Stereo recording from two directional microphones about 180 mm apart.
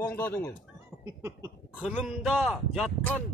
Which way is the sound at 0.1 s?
10° left (ahead or behind).